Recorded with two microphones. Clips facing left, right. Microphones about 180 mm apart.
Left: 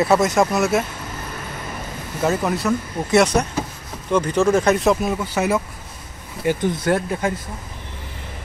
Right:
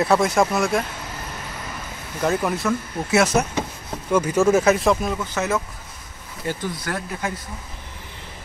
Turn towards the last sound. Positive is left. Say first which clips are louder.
# left 8 dB
turn(degrees=25)  # may be behind; listen again after turning